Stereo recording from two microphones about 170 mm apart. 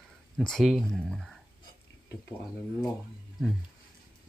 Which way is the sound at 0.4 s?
Centre (ahead or behind).